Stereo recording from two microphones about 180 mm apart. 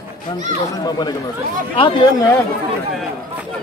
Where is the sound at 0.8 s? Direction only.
25° left (ahead or behind).